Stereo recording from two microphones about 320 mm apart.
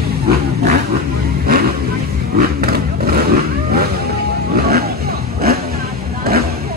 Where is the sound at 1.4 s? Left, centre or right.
Right.